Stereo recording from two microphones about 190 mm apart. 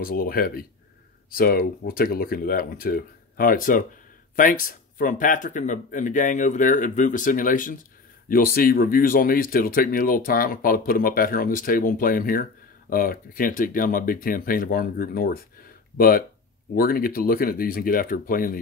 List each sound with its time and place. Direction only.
0.0 s speech: 50° left (ahead or behind)